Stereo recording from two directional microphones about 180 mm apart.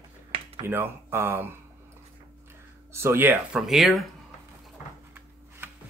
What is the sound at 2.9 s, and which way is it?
Speech, 15° right (ahead or behind).